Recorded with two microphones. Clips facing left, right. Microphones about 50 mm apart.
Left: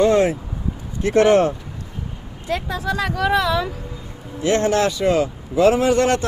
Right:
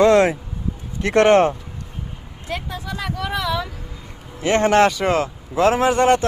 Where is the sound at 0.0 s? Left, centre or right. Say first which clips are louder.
Right 2 dB; right.